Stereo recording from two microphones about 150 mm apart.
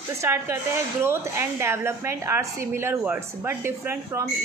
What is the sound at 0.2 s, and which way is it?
A woman's voice, 15° right (ahead or behind).